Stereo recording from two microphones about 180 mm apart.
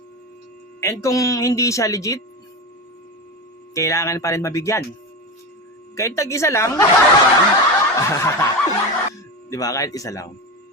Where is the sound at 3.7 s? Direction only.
15° left (ahead or behind).